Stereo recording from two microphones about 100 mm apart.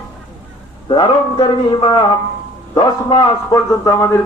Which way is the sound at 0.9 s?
50° left (ahead or behind).